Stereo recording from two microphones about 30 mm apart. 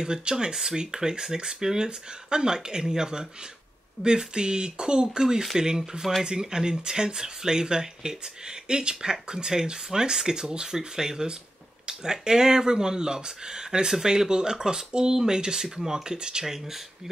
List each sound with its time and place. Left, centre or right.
0.0 s speech: right
16.2 s speech: right